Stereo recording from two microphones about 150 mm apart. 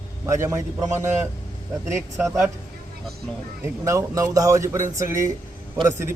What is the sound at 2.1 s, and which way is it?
Speech, 20° right (ahead or behind).